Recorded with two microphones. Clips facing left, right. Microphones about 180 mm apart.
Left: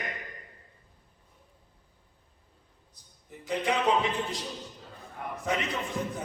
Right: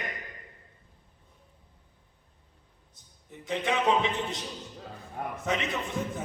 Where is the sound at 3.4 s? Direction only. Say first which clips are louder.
Even; 20° right (ahead or behind).